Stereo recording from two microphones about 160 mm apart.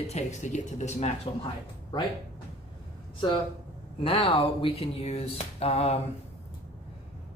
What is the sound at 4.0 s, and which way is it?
Speech, 35° left (ahead or behind).